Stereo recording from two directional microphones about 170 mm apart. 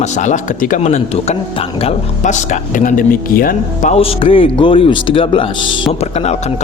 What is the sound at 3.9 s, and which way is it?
Speech, 35° left (ahead or behind).